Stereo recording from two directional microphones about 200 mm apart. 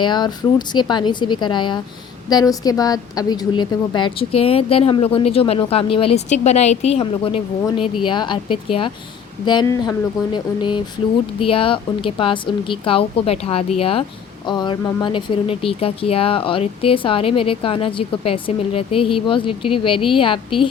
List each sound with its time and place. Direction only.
0.0 s speech: 20° left (ahead or behind)